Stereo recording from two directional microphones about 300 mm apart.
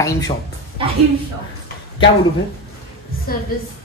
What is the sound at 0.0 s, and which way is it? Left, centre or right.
Speech, centre.